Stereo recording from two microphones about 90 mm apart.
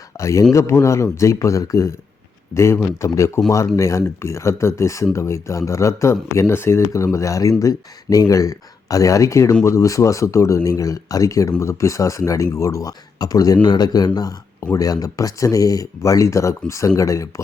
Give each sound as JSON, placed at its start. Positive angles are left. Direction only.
{"t": 0.2, "sound": "speech", "side_deg": 35}